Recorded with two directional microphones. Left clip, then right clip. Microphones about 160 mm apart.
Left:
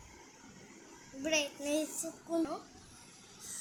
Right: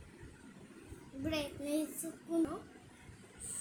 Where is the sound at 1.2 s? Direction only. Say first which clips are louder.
Left 5 dB; 10° left (ahead or behind).